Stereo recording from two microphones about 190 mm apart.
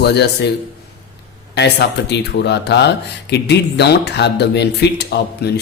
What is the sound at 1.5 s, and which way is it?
Speech, 60° left (ahead or behind).